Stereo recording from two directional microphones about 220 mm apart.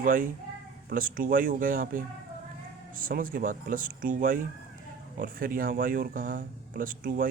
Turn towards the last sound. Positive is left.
turn(degrees=-40)  # may be behind; listen again after turning